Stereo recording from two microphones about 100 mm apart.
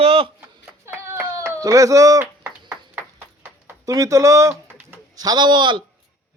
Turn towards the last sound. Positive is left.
turn(degrees=-50)  # may be behind; listen again after turning